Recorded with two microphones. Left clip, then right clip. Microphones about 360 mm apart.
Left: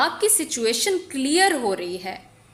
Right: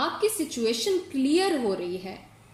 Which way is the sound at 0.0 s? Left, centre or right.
Left.